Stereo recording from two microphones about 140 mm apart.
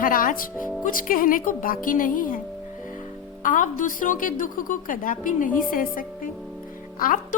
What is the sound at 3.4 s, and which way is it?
A woman's voice, 70° left (ahead or behind).